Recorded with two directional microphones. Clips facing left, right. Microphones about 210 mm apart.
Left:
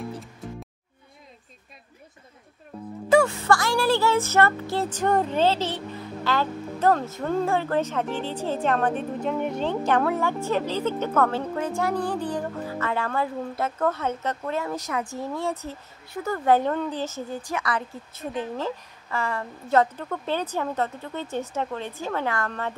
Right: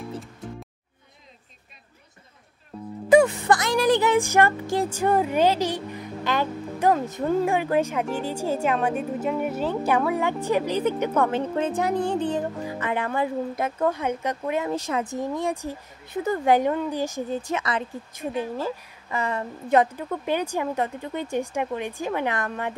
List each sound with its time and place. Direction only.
0.4 s music: centre (ahead or behind)
3.1 s music: 15° right (ahead or behind)
17.4 s music: 25° right (ahead or behind)